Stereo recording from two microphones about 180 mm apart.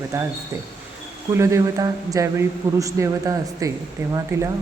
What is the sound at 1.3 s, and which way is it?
Speech, 15° right (ahead or behind).